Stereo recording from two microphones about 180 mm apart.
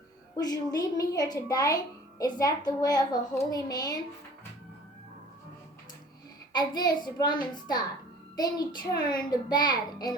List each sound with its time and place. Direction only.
0.3 s speech: 20° left (ahead or behind)
6.5 s speech: 20° left (ahead or behind)